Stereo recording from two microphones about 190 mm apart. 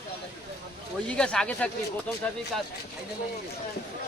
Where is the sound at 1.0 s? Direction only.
5° left (ahead or behind).